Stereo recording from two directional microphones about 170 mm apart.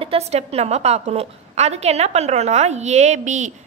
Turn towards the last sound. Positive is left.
turn(degrees=-45)  # may be behind; listen again after turning